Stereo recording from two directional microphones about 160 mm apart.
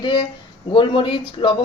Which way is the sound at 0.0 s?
30° left (ahead or behind).